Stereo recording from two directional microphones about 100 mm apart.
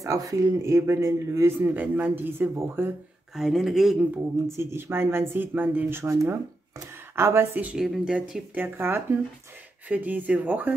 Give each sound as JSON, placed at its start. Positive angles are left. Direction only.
{"t": 0.0, "sound": "speech", "side_deg": -35}
{"t": 1.8, "sound": "speech", "side_deg": -15}
{"t": 3.3, "sound": "speech", "side_deg": -5}
{"t": 4.5, "sound": "speech", "side_deg": -25}
{"t": 7.7, "sound": "speech", "side_deg": -5}
{"t": 8.6, "sound": "speech", "side_deg": -20}